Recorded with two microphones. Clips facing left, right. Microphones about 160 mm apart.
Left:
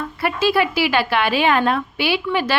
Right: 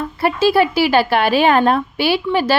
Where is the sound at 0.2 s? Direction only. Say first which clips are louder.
Right 4 dB; 30° right (ahead or behind).